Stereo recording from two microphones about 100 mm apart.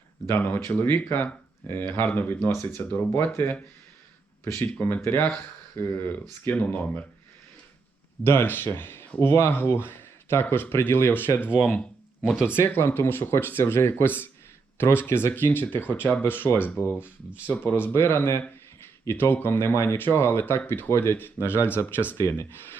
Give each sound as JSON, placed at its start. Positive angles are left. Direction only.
{"t": 0.3, "sound": "speech", "side_deg": 20}
{"t": 8.2, "sound": "speech", "side_deg": 20}
{"t": 11.4, "sound": "speech", "side_deg": -15}
{"t": 12.5, "sound": "speech", "side_deg": 20}